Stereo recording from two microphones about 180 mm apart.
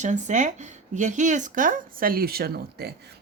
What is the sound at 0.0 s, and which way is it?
Speech, 40° right (ahead or behind).